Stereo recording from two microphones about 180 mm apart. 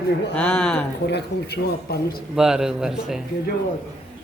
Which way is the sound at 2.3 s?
5° right (ahead or behind).